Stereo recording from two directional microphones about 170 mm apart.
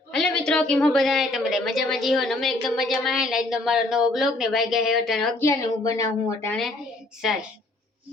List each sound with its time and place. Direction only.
0.1 s a woman's voice: 5° left (ahead or behind)
5.4 s speech: 15° left (ahead or behind)